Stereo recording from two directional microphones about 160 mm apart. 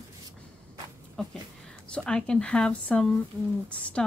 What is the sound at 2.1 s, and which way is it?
Speech, 5° left (ahead or behind).